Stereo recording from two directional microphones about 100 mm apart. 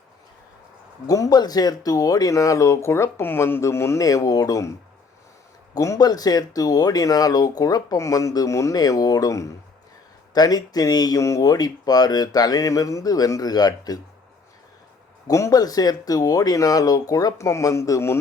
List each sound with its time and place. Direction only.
1.0 s speech: 35° left (ahead or behind)
5.7 s speech: 35° left (ahead or behind)
15.3 s speech: 35° left (ahead or behind)